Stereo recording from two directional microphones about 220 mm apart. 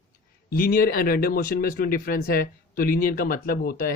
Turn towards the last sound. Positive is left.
turn(degrees=40)  # may be behind; listen again after turning